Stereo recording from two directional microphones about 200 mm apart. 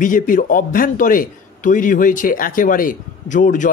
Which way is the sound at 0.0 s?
40° left (ahead or behind).